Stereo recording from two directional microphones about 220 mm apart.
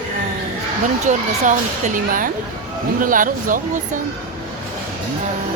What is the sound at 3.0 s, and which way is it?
Speech, 40° right (ahead or behind).